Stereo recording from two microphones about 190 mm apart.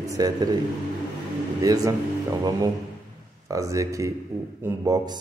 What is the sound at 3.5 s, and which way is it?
A man's voice, 15° right (ahead or behind).